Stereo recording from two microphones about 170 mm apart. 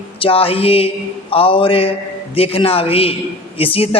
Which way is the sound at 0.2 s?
35° left (ahead or behind).